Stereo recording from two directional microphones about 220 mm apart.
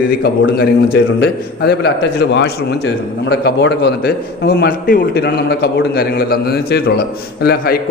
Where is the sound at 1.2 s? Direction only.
50° left (ahead or behind).